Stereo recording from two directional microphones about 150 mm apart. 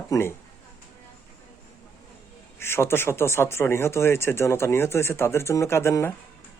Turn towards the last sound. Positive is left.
turn(degrees=15)  # may be behind; listen again after turning